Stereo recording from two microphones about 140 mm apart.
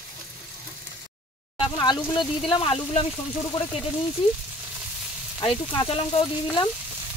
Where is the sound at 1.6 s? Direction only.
30° left (ahead or behind).